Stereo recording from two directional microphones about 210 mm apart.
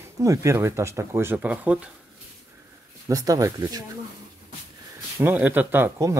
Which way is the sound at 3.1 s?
15° right (ahead or behind).